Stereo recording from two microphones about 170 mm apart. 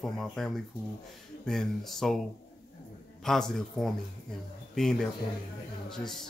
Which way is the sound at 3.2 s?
Centre (ahead or behind).